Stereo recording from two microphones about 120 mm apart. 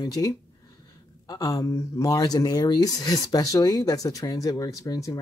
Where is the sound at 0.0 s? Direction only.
30° left (ahead or behind).